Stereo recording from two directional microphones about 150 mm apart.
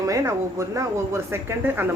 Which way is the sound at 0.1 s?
20° right (ahead or behind).